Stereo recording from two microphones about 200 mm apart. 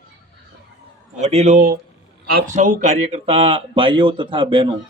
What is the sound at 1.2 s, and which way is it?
A man's voice, 35° right (ahead or behind).